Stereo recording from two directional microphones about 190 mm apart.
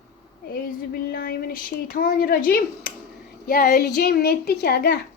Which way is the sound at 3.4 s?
50° left (ahead or behind).